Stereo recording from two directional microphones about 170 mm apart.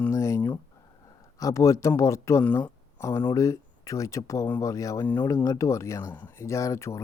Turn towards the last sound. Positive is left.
turn(degrees=15)  # may be behind; listen again after turning